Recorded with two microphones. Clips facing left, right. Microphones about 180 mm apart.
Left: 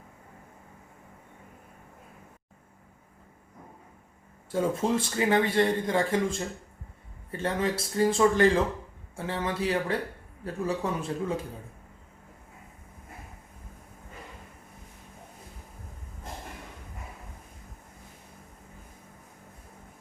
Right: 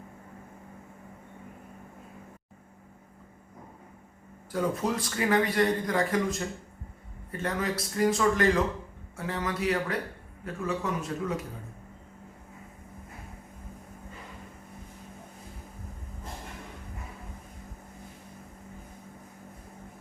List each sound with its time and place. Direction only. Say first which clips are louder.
4.5 s a man's voice: left 2 dB; 25° left (ahead or behind)